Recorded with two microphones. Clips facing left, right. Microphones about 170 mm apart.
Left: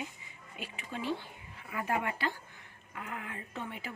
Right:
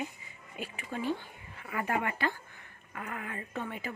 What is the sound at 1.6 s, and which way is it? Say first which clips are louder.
A woman's voice: right 1 dB; 65° right (ahead or behind).